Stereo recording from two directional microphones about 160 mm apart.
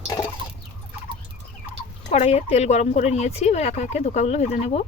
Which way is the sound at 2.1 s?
40° left (ahead or behind).